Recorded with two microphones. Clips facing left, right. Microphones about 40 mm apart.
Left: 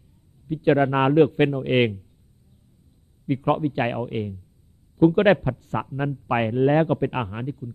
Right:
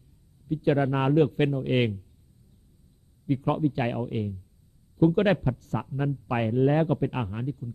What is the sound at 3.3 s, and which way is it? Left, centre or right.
Speech, left.